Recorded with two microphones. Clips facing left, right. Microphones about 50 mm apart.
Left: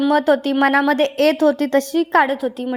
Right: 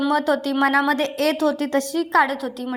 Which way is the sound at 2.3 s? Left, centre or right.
Left.